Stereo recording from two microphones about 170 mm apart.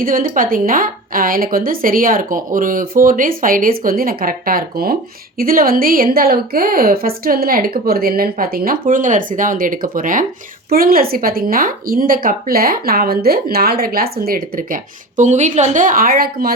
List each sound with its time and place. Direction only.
0.0 s speech: 55° right (ahead or behind)